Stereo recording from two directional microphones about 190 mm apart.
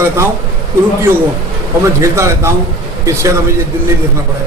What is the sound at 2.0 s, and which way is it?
A man's voice, 15° right (ahead or behind).